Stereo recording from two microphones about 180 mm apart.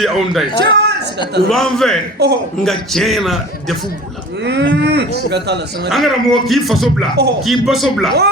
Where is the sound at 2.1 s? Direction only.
65° right (ahead or behind).